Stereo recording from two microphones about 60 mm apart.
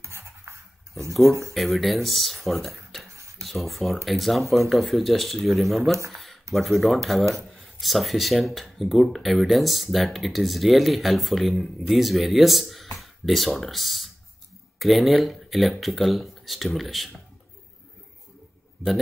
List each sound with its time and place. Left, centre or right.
0.0 s writing: right
1.5 s speech: centre
6.1 s a sound: centre
6.5 s speech: centre